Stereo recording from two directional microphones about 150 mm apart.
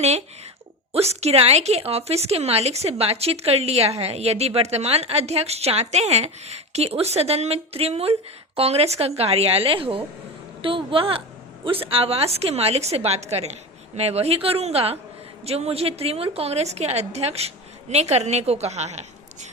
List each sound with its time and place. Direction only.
0.9 s a woman's voice: 45° right (ahead or behind)